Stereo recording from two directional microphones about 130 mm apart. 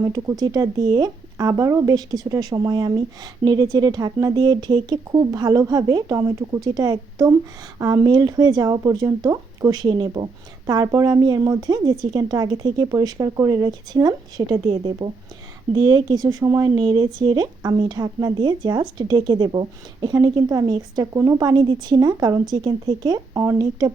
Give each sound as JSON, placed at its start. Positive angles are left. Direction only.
{"t": 0.1, "sound": "speech", "side_deg": -30}
{"t": 14.7, "sound": "speech", "side_deg": -40}
{"t": 23.3, "sound": "speech", "side_deg": -20}